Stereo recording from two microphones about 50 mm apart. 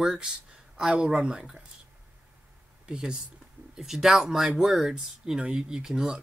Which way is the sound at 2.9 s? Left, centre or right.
Centre.